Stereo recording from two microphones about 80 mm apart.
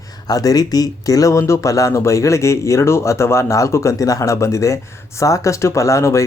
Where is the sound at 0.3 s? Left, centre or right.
Left.